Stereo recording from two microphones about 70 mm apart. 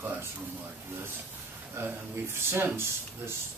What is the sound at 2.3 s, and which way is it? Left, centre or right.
Speech, right.